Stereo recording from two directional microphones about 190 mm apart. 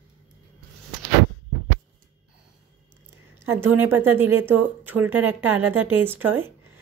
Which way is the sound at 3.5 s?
10° right (ahead or behind).